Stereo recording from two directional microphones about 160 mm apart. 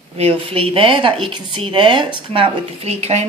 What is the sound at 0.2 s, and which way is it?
Speech, 35° right (ahead or behind).